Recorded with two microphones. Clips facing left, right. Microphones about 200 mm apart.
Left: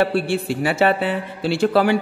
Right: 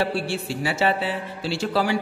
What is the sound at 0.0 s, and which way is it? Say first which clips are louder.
A man's voice: left 6 dB; 55° left (ahead or behind).